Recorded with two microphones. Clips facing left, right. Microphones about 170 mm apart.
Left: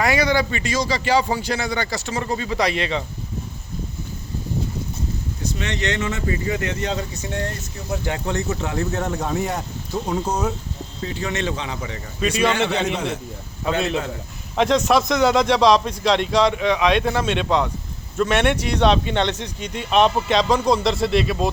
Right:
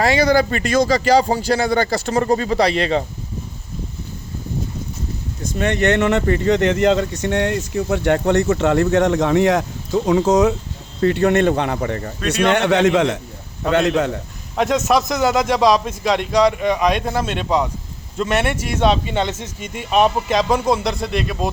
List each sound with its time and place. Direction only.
0.0 s speech: 30° right (ahead or behind)
1.6 s speech: 50° right (ahead or behind)
5.4 s speech: 50° right (ahead or behind); by 10.5 s 90° right
11.0 s speech: 65° right (ahead or behind)
12.5 s a man's voice: 70° right (ahead or behind); by 13.1 s 90° right
13.7 s a man's voice: 80° right
14.5 s a man's voice: centre (ahead or behind)